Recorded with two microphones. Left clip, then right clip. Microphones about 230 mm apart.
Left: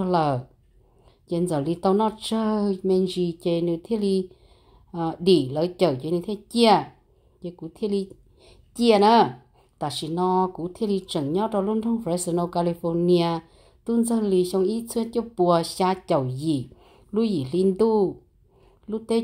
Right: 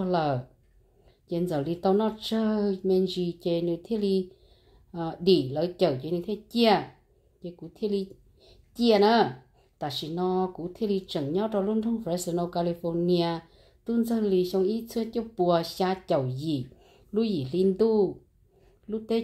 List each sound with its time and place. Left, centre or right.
0.0 s a woman's voice: left